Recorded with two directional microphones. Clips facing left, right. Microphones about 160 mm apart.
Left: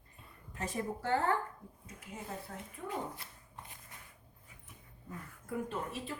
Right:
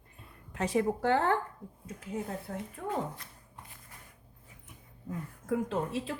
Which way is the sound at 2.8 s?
60° right (ahead or behind).